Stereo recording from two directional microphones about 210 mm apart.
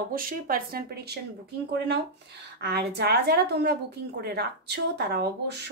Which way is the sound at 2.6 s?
50° right (ahead or behind).